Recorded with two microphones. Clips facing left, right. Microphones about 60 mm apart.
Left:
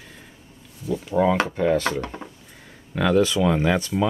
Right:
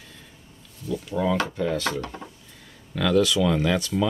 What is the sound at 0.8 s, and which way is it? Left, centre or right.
Speech, left.